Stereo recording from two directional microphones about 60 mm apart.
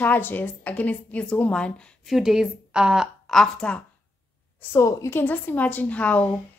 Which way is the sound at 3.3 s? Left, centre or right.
Centre.